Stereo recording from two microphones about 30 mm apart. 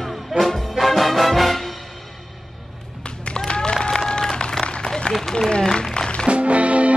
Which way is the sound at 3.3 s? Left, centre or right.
Left.